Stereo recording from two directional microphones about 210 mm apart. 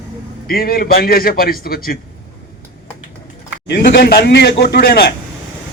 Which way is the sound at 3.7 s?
50° left (ahead or behind).